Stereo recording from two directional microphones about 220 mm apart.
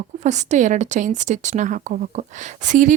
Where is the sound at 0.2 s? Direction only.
30° right (ahead or behind).